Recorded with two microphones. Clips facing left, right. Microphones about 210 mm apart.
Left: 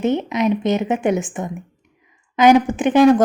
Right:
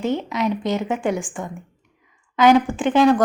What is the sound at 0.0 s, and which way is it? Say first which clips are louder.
A woman's voice: left 4 dB; 20° left (ahead or behind).